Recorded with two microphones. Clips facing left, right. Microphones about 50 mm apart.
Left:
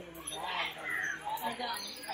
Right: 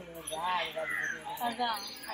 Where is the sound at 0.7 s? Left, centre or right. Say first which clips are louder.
Right 2 dB; right.